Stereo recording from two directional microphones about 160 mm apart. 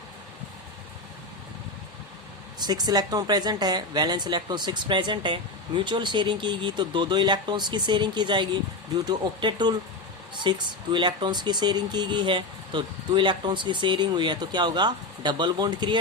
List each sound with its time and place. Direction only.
2.6 s speech: 25° right (ahead or behind)